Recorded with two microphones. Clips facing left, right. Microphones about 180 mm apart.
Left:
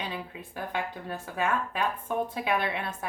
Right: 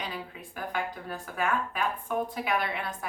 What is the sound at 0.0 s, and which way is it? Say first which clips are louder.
Speech: left 1 dB; 25° left (ahead or behind).